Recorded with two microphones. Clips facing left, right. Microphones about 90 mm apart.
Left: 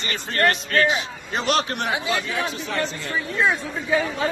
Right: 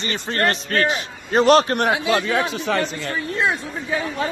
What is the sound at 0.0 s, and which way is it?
A man's voice, 30° right (ahead or behind).